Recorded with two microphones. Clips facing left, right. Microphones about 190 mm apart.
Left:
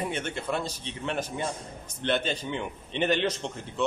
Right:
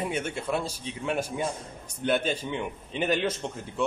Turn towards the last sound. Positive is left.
turn(degrees=-5)  # may be behind; listen again after turning